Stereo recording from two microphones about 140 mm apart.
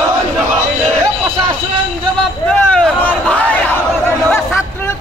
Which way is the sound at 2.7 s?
10° left (ahead or behind).